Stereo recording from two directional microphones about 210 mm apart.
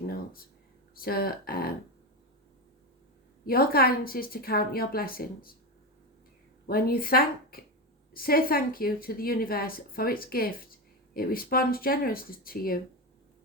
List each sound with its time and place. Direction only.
0.9 s a woman's voice: 45° left (ahead or behind)
3.4 s a woman's voice: 45° left (ahead or behind)
6.7 s a woman's voice: 45° left (ahead or behind)